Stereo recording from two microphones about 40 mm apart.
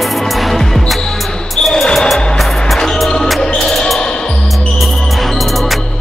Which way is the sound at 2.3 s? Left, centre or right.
Centre.